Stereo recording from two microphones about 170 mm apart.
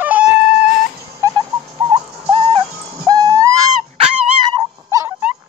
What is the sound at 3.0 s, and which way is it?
Music, 20° right (ahead or behind).